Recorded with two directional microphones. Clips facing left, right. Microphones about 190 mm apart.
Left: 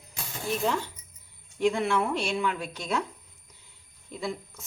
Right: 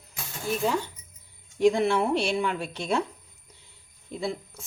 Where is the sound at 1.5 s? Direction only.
35° right (ahead or behind).